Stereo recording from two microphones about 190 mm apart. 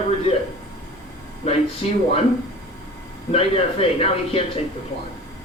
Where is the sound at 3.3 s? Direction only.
30° left (ahead or behind).